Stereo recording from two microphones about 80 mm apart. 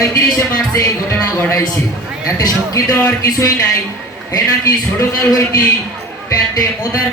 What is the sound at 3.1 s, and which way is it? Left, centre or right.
Speech, left.